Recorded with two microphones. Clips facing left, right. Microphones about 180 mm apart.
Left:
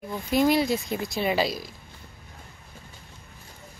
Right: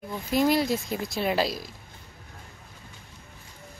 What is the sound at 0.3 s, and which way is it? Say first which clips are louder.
A woman's voice: left 1 dB; centre (ahead or behind).